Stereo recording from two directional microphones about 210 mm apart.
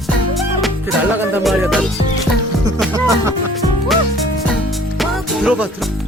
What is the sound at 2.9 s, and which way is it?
Music, 15° right (ahead or behind).